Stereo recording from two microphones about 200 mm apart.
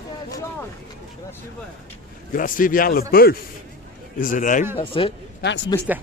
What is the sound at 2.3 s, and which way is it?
A man's voice, 45° left (ahead or behind).